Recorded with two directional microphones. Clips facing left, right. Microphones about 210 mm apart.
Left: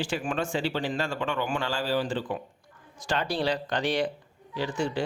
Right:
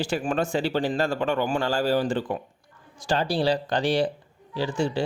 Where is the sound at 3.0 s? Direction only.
30° right (ahead or behind).